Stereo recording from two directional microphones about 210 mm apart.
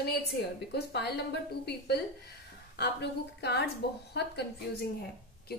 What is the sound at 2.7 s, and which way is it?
A woman's voice, 50° left (ahead or behind).